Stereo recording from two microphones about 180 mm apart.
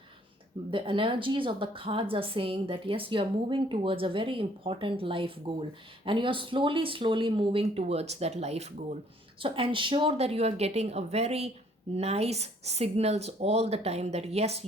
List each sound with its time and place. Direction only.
0.7 s a woman's voice: 30° right (ahead or behind)